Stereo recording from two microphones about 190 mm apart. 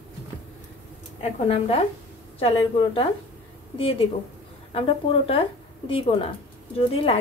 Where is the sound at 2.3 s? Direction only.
30° left (ahead or behind).